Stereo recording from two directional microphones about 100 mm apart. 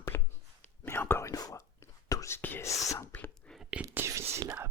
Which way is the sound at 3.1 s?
15° left (ahead or behind).